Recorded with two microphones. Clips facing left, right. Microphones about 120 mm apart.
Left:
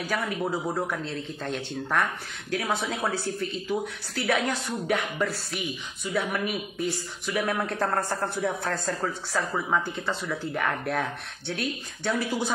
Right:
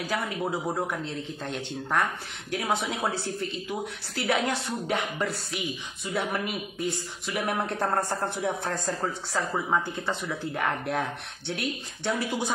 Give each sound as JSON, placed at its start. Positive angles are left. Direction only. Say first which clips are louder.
{"t": 0.1, "sound": "speech", "louder": "left 2 dB", "side_deg": -25}
{"t": 0.4, "sound": "speech", "louder": "left 1 dB", "side_deg": 0}
{"t": 0.7, "sound": "a man's voice", "louder": "left 1 dB", "side_deg": -20}